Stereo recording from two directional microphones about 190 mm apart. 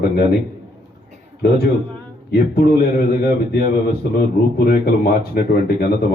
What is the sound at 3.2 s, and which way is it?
Speech, 55° left (ahead or behind).